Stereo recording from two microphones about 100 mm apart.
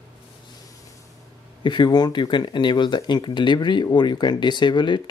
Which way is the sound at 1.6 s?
50° left (ahead or behind).